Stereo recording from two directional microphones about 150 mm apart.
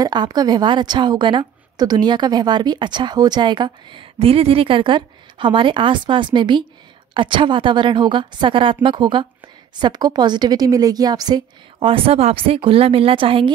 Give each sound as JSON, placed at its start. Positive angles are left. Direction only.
{"t": 0.0, "sound": "a woman's voice", "side_deg": -30}